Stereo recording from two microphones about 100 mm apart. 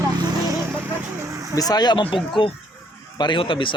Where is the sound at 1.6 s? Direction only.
40° left (ahead or behind).